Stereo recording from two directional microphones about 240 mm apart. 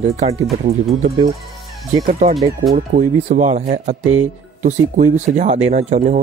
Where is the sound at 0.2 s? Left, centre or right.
Right.